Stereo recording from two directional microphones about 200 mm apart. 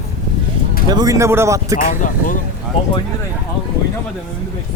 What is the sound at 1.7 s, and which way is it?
Speech, 40° left (ahead or behind).